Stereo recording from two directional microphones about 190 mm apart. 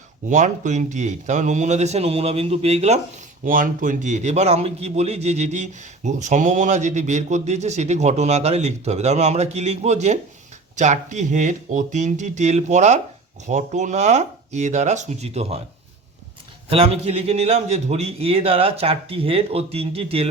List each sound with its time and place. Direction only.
0.3 s speech: 40° right (ahead or behind)
3.4 s speech: 45° right (ahead or behind)
16.6 s speech: 30° right (ahead or behind)